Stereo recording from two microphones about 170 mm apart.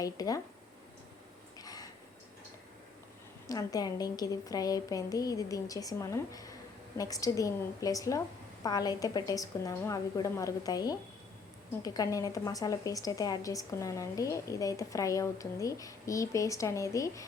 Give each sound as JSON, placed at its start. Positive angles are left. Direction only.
{"t": 0.0, "sound": "a woman's voice", "side_deg": 20}
{"t": 1.5, "sound": "a sound", "side_deg": 20}
{"t": 3.4, "sound": "a woman's voice", "side_deg": 20}